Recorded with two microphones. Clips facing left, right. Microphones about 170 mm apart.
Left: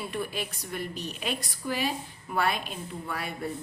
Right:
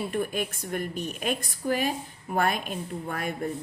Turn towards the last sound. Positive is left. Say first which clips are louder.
# right 3 dB
turn(degrees=-45)  # may be behind; listen again after turning